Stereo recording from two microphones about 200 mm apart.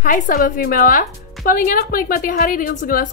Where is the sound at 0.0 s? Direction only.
45° left (ahead or behind).